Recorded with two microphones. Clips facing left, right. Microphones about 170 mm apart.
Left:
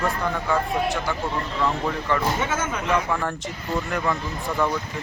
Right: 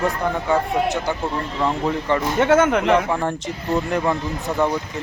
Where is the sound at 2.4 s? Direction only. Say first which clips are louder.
Right 11 dB; 65° right (ahead or behind).